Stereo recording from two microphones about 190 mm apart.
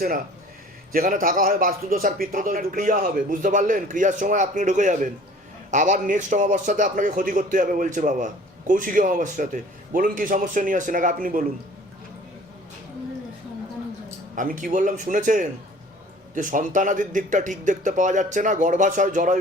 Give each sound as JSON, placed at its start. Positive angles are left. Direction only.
{"t": 0.9, "sound": "a man's voice", "side_deg": -45}
{"t": 14.3, "sound": "a man's voice", "side_deg": -45}